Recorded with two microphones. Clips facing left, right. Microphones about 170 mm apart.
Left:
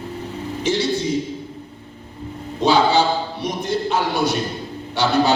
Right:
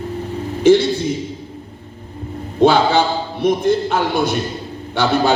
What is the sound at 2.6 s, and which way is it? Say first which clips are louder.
A man's voice: right 3 dB; 55° right (ahead or behind).